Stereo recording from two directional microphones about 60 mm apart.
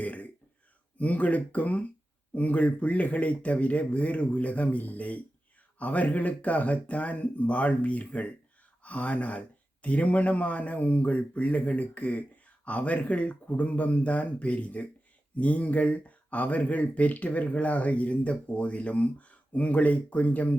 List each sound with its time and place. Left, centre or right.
0.0 s speech: left